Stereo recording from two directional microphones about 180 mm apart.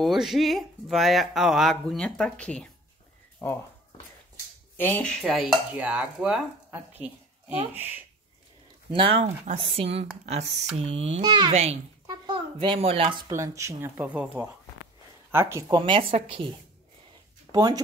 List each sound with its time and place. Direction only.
0.0 s speech: centre (ahead or behind)
4.7 s speech: 10° left (ahead or behind)
5.2 s speech: centre (ahead or behind)
8.9 s speech: 30° right (ahead or behind)
11.5 s speech: 35° right (ahead or behind)
12.1 s speech: 25° right (ahead or behind)
13.3 s speech: 15° right (ahead or behind)
15.8 s a woman's voice: 30° right (ahead or behind)